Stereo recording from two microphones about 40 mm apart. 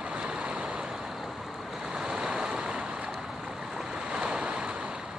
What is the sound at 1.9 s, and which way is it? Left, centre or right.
Vehicle, centre.